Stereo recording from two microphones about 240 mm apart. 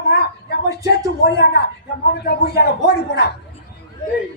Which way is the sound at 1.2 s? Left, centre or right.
Left.